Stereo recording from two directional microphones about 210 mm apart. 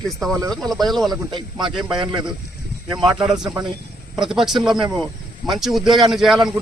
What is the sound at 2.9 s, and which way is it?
Speech, 5° right (ahead or behind).